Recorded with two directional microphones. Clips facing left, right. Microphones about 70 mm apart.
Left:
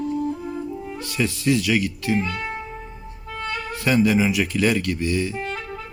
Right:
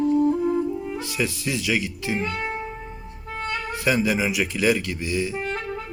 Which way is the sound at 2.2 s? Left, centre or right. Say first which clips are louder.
Right 1 dB; right.